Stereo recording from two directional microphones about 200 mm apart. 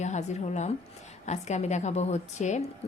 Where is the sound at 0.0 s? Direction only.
35° left (ahead or behind).